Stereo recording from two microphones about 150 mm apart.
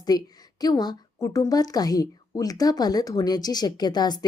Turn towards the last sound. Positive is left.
turn(degrees=30)  # may be behind; listen again after turning